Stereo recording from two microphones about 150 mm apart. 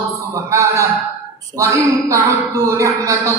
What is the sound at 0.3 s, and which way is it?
A woman's voice, 20° right (ahead or behind).